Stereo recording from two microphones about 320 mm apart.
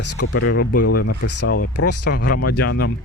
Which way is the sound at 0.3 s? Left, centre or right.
Left.